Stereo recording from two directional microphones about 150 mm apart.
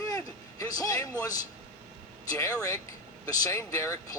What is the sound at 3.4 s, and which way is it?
Speech, 20° left (ahead or behind).